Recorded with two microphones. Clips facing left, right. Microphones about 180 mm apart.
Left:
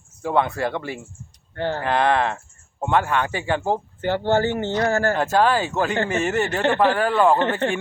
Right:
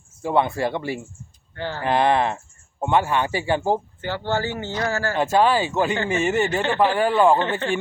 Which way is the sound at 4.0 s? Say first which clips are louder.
Left 5 dB; 55° left (ahead or behind).